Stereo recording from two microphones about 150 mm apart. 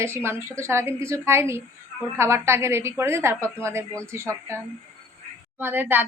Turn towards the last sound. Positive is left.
turn(degrees=-15)  # may be behind; listen again after turning